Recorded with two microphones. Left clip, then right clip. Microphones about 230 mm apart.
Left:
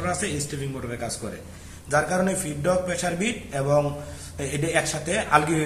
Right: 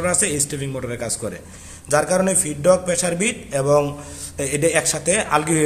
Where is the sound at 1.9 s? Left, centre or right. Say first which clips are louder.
Right 5 dB; right.